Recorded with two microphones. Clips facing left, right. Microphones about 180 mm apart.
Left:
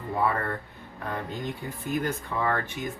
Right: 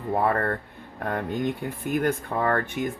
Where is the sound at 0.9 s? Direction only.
60° right (ahead or behind).